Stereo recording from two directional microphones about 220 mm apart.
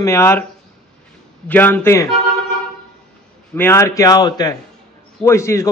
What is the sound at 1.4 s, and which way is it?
Speech, 10° left (ahead or behind).